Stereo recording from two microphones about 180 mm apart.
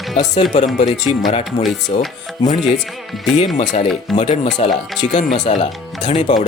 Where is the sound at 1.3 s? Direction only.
35° left (ahead or behind).